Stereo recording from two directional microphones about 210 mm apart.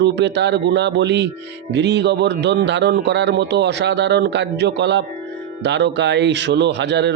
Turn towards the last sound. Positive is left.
turn(degrees=-55)  # may be behind; listen again after turning